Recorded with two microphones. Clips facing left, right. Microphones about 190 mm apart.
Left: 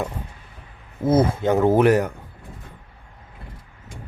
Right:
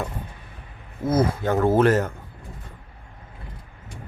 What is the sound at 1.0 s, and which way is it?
Speech, 25° left (ahead or behind).